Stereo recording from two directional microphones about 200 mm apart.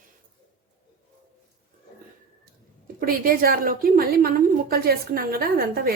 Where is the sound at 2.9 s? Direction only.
45° right (ahead or behind).